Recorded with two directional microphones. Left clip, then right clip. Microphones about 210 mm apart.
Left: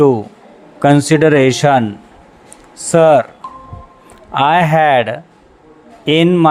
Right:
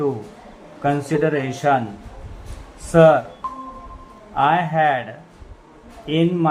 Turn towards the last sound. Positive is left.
turn(degrees=45)  # may be behind; listen again after turning